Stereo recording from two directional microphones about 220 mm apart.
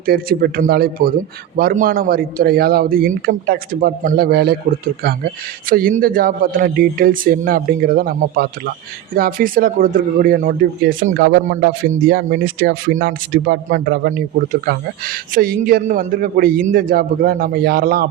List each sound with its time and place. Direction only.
0.0 s a man's voice: 40° right (ahead or behind)